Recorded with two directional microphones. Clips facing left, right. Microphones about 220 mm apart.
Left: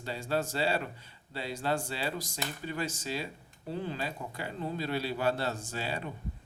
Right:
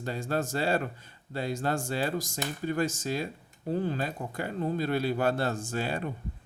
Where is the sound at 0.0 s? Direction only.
50° right (ahead or behind).